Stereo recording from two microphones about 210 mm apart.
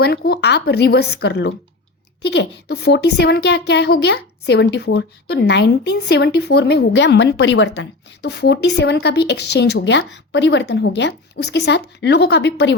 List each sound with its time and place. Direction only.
0.0 s a woman's voice: 50° left (ahead or behind)